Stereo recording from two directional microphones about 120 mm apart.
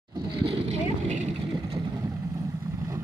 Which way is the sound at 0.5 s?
65° right (ahead or behind).